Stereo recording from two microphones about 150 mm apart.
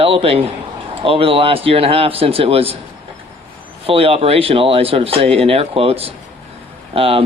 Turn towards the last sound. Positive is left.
turn(degrees=-40)  # may be behind; listen again after turning